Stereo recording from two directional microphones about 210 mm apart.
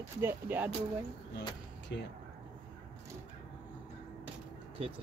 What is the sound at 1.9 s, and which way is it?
Speech, 55° left (ahead or behind).